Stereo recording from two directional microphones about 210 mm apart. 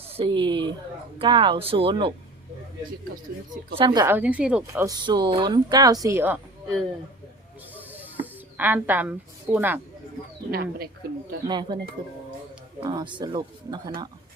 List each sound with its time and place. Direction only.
0.2 s speech: 25° right (ahead or behind)
3.8 s a woman's voice: 20° right (ahead or behind)
7.9 s speech: 10° right (ahead or behind)
10.5 s speech: 45° right (ahead or behind)
11.4 s speech: 20° right (ahead or behind)